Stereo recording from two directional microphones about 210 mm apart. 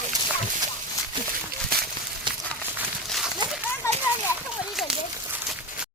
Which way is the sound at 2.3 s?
20° right (ahead or behind).